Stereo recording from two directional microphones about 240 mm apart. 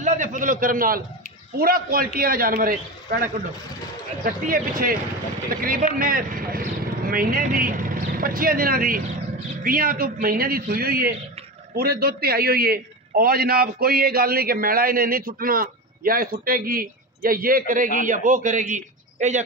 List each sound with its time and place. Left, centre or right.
0.0 s a man's voice: right